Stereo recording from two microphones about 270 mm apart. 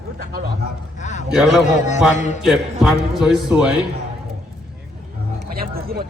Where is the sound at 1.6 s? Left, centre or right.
Left.